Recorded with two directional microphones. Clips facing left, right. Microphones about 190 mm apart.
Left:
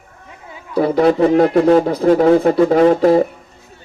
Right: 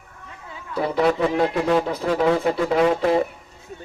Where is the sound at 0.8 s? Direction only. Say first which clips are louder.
Left 7 dB; 40° left (ahead or behind).